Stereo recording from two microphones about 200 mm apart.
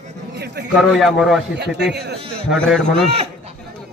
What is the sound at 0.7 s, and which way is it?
Speech, centre (ahead or behind).